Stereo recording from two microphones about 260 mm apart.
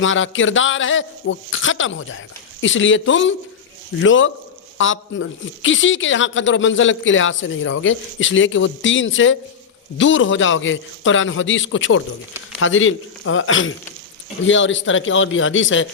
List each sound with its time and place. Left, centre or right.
0.0 s speech: left